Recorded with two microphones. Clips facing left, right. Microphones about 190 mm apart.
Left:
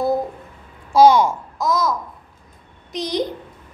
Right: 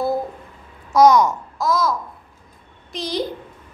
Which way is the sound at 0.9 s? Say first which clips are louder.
Left 1 dB; 30° left (ahead or behind).